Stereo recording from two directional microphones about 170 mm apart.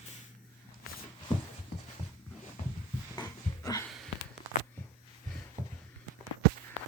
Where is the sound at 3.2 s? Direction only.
20° left (ahead or behind).